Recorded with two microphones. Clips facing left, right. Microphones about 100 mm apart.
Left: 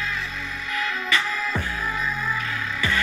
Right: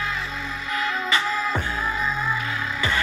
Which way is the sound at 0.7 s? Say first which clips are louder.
Right 1 dB; 25° right (ahead or behind).